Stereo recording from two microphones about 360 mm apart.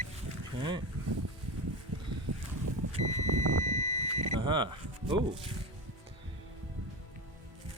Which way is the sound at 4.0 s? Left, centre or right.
Centre.